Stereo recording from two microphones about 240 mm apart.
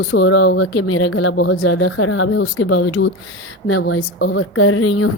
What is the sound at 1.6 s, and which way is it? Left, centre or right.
Speech, left.